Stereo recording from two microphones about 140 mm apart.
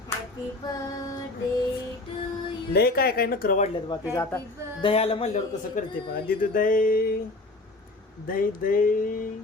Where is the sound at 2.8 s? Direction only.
90° left.